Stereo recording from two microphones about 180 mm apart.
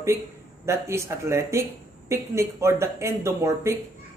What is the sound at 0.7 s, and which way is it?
Speech, 15° right (ahead or behind).